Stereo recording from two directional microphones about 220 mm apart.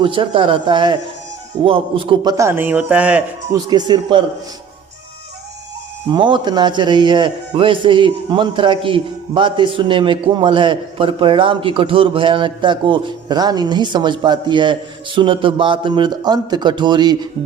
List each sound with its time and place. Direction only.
0.0 s a man's voice: 25° right (ahead or behind); by 3.6 s 5° right (ahead or behind)
3.7 s a man's voice: 20° right (ahead or behind)
6.1 s a man's voice: 20° right (ahead or behind)